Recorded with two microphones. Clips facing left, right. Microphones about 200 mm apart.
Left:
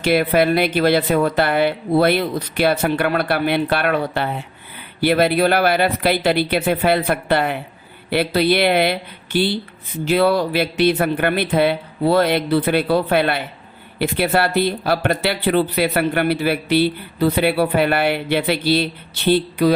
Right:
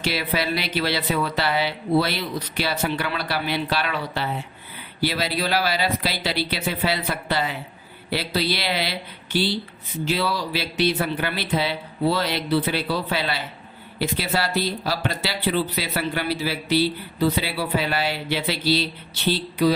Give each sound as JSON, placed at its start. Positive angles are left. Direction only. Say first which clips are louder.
{"t": 0.0, "sound": "speech", "louder": "left 9 dB", "side_deg": 55}